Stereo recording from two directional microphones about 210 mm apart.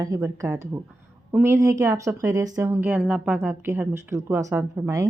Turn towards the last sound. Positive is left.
turn(degrees=-15)  # may be behind; listen again after turning